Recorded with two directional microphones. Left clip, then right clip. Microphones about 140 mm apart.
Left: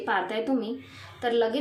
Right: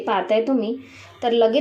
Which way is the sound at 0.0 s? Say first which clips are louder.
Right 7 dB; 15° right (ahead or behind).